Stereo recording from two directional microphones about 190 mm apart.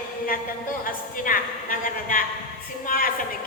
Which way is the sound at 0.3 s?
45° left (ahead or behind).